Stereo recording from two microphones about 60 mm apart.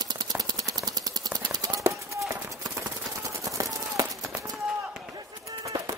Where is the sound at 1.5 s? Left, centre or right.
Right.